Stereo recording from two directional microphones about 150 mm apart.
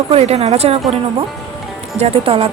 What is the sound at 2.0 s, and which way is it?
Speech, 40° right (ahead or behind).